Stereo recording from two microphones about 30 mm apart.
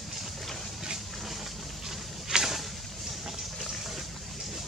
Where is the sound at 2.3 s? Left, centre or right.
Right.